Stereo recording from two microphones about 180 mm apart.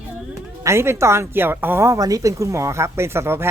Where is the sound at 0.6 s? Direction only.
15° right (ahead or behind).